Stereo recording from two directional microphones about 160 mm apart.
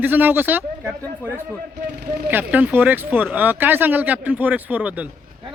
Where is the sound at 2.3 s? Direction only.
10° right (ahead or behind).